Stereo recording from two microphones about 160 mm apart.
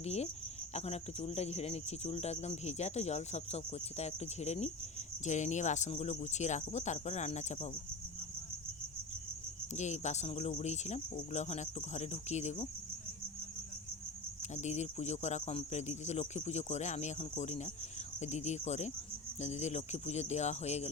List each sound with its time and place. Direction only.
0.0 s cricket: 40° left (ahead or behind)
0.7 s speech: 40° left (ahead or behind)
9.7 s speech: 45° left (ahead or behind)
14.5 s speech: 45° left (ahead or behind)